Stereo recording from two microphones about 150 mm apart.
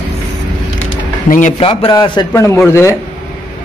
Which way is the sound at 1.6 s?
40° left (ahead or behind).